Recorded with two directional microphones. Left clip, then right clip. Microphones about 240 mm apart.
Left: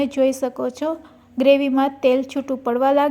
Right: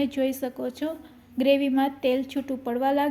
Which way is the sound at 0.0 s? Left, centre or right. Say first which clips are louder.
Left 8 dB; centre.